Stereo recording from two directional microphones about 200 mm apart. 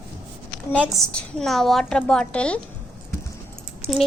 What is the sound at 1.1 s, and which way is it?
A woman's voice, centre (ahead or behind).